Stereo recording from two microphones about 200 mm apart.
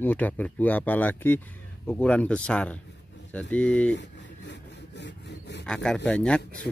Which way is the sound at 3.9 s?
60° left (ahead or behind).